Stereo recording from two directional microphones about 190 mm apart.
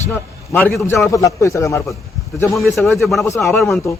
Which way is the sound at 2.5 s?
Centre (ahead or behind).